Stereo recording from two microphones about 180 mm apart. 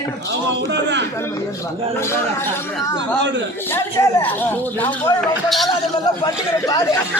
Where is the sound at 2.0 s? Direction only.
15° left (ahead or behind).